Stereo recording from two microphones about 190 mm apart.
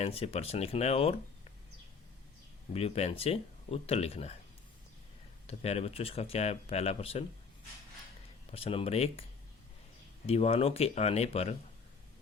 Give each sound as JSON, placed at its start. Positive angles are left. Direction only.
{"t": 0.0, "sound": "speech", "side_deg": 30}
{"t": 2.7, "sound": "speech", "side_deg": 35}
{"t": 5.5, "sound": "speech", "side_deg": 35}
{"t": 8.4, "sound": "speech", "side_deg": 30}
{"t": 10.2, "sound": "speech", "side_deg": 30}